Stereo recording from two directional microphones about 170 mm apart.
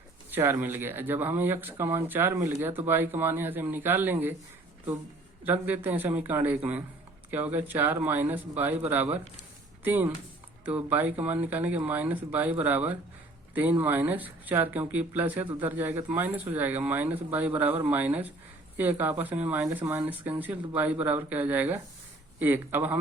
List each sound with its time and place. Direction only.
0.3 s speech: 15° right (ahead or behind)
5.4 s speech: 10° right (ahead or behind)